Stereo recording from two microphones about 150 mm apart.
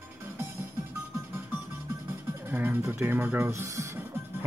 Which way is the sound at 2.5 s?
10° right (ahead or behind).